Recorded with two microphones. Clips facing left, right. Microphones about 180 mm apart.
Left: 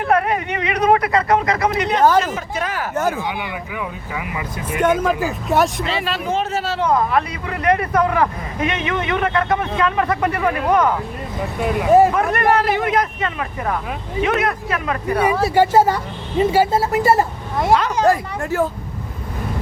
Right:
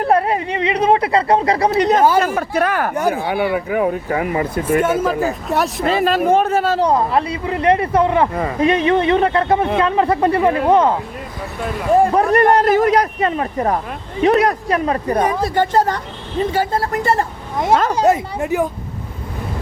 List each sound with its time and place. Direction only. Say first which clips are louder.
0.0 s speech: right 2 dB; 30° right (ahead or behind)
2.3 s speech: right 7 dB; 55° right (ahead or behind)
2.9 s speech: right 2 dB; 15° right (ahead or behind)
3.2 s speech: right 7 dB; 50° right (ahead or behind)
4.8 s speech: left 4 dB; 5° right (ahead or behind)
5.8 s speech: right 7 dB; 50° right (ahead or behind)
6.7 s speech: right 2 dB; 30° right (ahead or behind)
11.6 s speech: left 2 dB; 5° left (ahead or behind)
12.1 s speech: right 4 dB; 35° right (ahead or behind)
15.2 s speech: left 5 dB; 10° left (ahead or behind)
17.7 s speech: right 3 dB; 45° right (ahead or behind)
18.1 s speech: right 2 dB; 20° right (ahead or behind)